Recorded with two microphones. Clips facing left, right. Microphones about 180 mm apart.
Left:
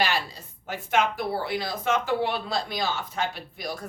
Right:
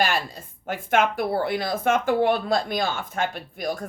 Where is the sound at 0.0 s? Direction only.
50° right (ahead or behind).